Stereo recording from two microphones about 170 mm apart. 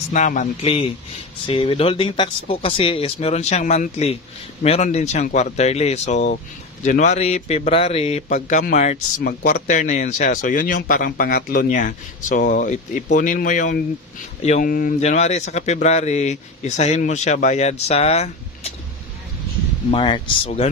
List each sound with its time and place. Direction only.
0.1 s a man's voice: 45° left (ahead or behind)
19.9 s a man's voice: 30° left (ahead or behind)